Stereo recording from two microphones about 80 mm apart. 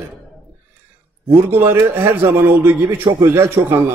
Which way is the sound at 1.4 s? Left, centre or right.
Right.